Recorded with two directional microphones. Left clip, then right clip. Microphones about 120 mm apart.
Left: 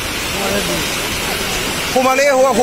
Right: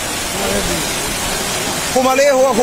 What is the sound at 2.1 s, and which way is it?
Speech, 15° right (ahead or behind).